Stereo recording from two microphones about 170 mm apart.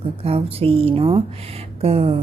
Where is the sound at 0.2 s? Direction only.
35° right (ahead or behind).